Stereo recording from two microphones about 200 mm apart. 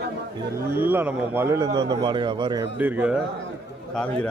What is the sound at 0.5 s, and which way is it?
Speech, 10° right (ahead or behind).